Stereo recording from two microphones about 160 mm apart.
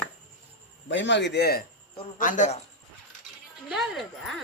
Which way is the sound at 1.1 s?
90° left.